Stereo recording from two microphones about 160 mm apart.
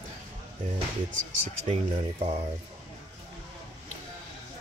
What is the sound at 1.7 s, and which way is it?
Speech, 40° right (ahead or behind).